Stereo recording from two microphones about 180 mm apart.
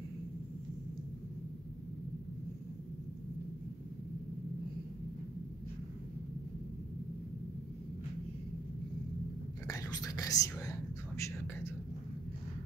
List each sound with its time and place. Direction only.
9.7 s whispering: 20° left (ahead or behind)